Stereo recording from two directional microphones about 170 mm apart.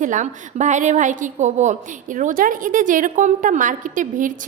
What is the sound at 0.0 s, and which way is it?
A woman's voice, 45° right (ahead or behind).